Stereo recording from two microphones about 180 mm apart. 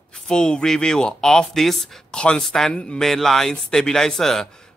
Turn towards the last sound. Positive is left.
turn(degrees=5)  # may be behind; listen again after turning